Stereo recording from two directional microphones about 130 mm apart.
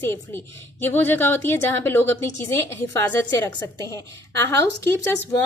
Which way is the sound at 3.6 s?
25° left (ahead or behind).